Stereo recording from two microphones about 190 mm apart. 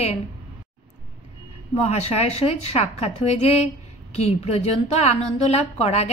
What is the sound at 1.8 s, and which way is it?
A woman's voice, 35° left (ahead or behind).